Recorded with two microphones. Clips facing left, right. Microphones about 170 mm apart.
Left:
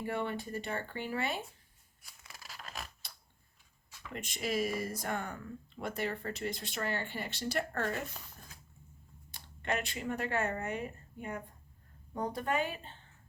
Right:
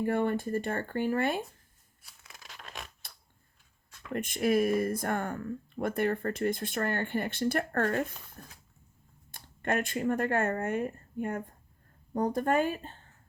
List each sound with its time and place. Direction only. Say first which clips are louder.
0.0 s speech: right 8 dB; 50° right (ahead or behind)
2.0 s tearing: even; centre (ahead or behind)
4.1 s speech: right 9 dB; 55° right (ahead or behind)
8.4 s a sound: right 6 dB; 55° right (ahead or behind)
9.3 s speech: right 5 dB; 50° right (ahead or behind)